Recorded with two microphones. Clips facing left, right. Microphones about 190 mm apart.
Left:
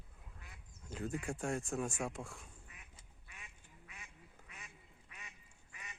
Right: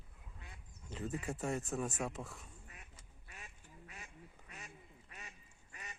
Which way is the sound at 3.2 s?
40° right (ahead or behind).